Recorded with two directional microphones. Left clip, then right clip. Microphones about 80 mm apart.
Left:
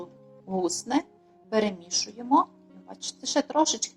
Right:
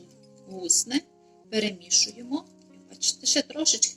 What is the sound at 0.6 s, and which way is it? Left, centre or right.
A woman's voice, left.